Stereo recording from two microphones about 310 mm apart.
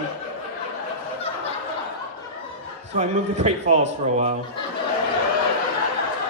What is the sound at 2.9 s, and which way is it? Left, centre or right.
A man's voice, right.